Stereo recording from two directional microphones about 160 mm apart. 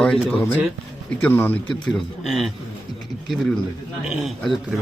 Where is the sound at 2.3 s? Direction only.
Centre (ahead or behind).